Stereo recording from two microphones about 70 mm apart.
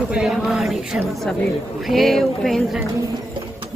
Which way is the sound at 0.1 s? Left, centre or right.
Centre.